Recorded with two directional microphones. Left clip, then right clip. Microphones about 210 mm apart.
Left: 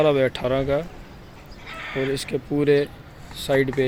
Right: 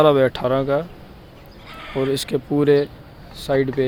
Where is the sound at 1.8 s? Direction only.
50° right (ahead or behind).